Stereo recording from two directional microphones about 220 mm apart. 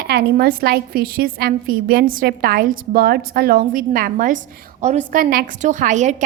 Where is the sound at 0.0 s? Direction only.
45° right (ahead or behind).